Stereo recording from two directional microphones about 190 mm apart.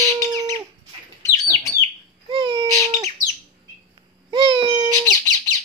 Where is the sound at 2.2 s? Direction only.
25° right (ahead or behind).